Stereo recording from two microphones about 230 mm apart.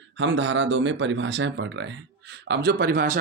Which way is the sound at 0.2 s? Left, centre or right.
Right.